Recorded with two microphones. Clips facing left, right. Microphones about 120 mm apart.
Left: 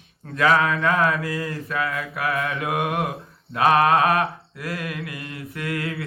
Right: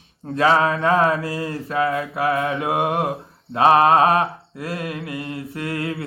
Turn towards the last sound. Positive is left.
turn(degrees=-30)  # may be behind; listen again after turning